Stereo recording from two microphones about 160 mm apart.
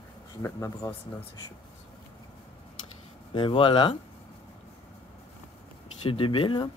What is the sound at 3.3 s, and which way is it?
Speech, 30° left (ahead or behind).